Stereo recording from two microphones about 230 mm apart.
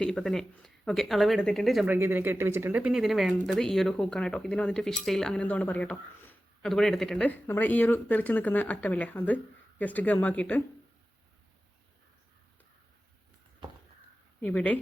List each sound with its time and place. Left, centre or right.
0.0 s speech: centre
14.4 s speech: centre